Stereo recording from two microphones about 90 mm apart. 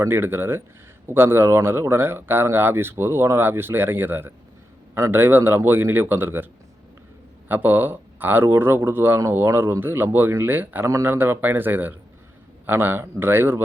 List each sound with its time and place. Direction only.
0.0 s speech: 25° right (ahead or behind)
10.8 s speech: 30° right (ahead or behind)